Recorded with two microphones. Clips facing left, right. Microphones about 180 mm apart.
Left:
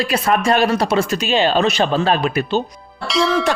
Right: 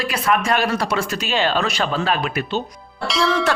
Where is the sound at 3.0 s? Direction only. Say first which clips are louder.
Left 2 dB; centre (ahead or behind).